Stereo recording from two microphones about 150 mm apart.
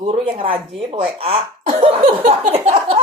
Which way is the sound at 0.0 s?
40° right (ahead or behind).